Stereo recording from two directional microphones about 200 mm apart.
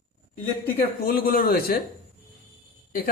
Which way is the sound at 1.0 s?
50° left (ahead or behind).